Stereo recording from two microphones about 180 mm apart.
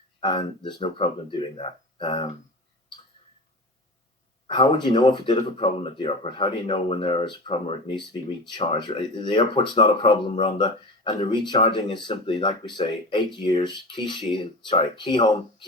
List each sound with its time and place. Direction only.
0.2 s speech: 25° left (ahead or behind)
4.4 s speech: 25° left (ahead or behind)